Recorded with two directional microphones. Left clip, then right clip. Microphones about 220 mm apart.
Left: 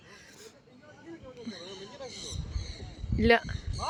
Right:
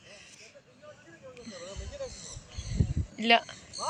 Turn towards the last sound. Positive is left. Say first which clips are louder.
# even
turn(degrees=15)  # may be behind; listen again after turning